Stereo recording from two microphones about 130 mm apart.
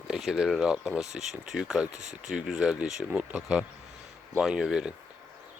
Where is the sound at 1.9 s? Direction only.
65° right (ahead or behind).